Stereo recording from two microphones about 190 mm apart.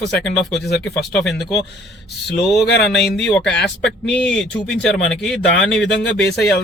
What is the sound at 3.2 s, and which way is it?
Speech, 5° left (ahead or behind).